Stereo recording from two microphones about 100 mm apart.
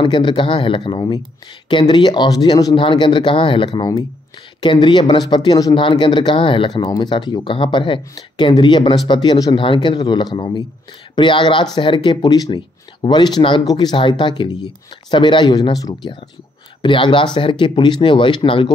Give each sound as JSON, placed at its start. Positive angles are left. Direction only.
{"t": 0.0, "sound": "speech", "side_deg": 50}
{"t": 5.8, "sound": "speech", "side_deg": 55}
{"t": 7.0, "sound": "speech", "side_deg": 50}